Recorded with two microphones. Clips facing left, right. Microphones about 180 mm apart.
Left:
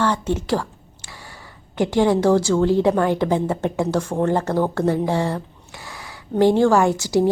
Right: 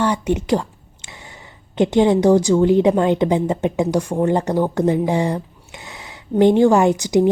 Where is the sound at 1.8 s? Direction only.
20° right (ahead or behind).